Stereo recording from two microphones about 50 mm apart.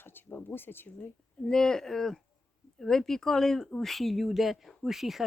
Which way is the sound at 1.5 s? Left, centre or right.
Centre.